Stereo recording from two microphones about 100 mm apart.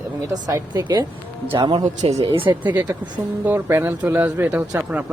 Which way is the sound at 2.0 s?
80° right.